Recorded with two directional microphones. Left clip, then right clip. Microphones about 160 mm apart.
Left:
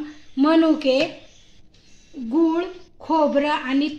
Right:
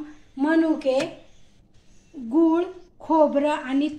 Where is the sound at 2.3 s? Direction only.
20° left (ahead or behind).